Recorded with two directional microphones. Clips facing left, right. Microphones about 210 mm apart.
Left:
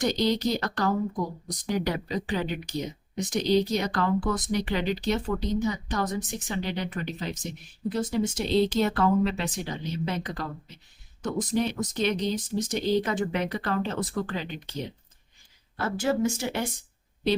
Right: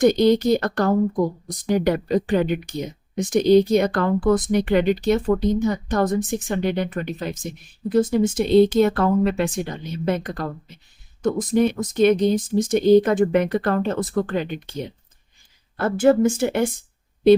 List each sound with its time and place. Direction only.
0.0 s speech: 55° right (ahead or behind)